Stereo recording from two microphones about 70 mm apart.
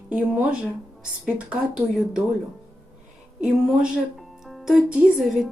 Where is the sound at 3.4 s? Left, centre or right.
Centre.